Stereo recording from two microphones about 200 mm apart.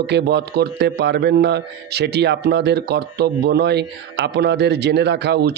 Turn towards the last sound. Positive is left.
turn(degrees=-55)  # may be behind; listen again after turning